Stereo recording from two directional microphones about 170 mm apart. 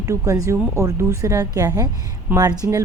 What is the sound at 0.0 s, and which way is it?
A woman's voice, 20° right (ahead or behind).